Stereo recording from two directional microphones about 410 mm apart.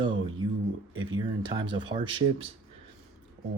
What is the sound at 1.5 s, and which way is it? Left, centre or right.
Speech, centre.